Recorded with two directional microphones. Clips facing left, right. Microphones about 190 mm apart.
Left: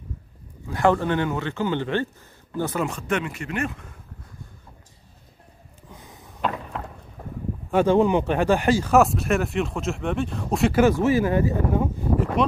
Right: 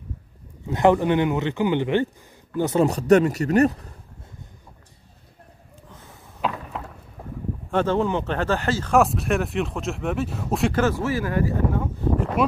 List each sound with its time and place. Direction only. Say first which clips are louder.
0.7 s a man's voice: right 3 dB; 20° right (ahead or behind)
2.8 s speech: right 14 dB; 40° right (ahead or behind)
5.9 s a sound: left 2 dB; 15° left (ahead or behind)
6.7 s a sound: left 1 dB; 5° right (ahead or behind)
7.7 s speech: left 4 dB; 15° left (ahead or behind)
8.9 s speech: right 1 dB; centre (ahead or behind)
10.8 s speech: left 4 dB; 15° left (ahead or behind)
12.4 s speech: even; 5° right (ahead or behind)